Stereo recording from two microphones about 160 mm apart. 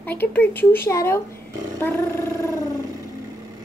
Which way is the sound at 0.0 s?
10° left (ahead or behind).